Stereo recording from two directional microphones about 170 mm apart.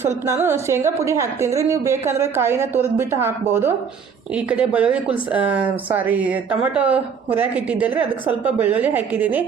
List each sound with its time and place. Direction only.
0.0 s speech: 15° right (ahead or behind)